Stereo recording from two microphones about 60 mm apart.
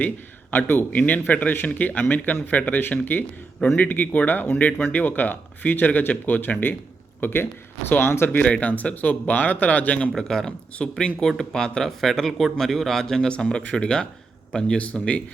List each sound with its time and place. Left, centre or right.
0.5 s a man's voice: left
8.6 s speech: left
10.2 s speech: centre